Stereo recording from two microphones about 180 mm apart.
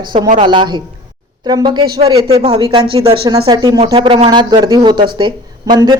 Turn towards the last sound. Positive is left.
turn(degrees=-20)  # may be behind; listen again after turning